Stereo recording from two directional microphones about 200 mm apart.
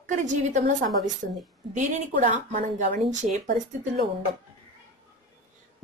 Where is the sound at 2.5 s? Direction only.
40° right (ahead or behind).